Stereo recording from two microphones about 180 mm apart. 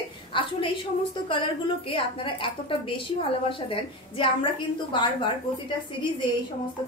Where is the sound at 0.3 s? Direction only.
30° left (ahead or behind).